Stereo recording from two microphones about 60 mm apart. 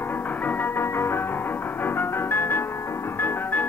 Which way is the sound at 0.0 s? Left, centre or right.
Left.